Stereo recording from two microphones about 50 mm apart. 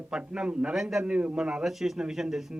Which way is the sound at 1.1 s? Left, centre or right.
Right.